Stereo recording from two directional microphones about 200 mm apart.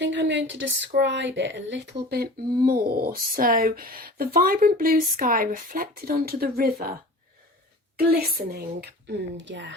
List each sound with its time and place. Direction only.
0.0 s speech: 65° right (ahead or behind); by 6.9 s 50° right (ahead or behind)
7.9 s speech: 50° right (ahead or behind)